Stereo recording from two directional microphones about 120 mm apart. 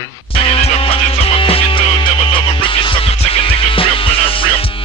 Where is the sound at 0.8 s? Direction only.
55° left (ahead or behind).